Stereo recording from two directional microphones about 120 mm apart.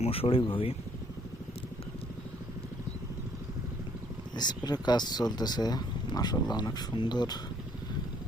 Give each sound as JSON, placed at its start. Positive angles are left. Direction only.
{"t": 0.0, "sound": "speech", "side_deg": 50}
{"t": 4.4, "sound": "speech", "side_deg": 35}